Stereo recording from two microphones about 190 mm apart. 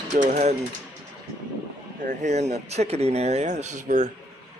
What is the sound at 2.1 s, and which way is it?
Speech, 35° right (ahead or behind).